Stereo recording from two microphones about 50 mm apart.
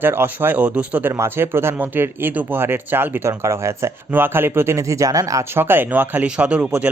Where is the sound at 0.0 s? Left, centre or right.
Right.